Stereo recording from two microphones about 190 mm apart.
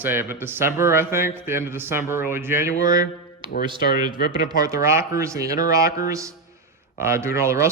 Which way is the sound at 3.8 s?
55° left (ahead or behind).